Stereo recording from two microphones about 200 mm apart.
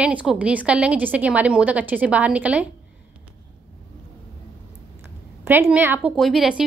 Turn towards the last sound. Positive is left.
turn(degrees=0)  # may be behind; listen again after turning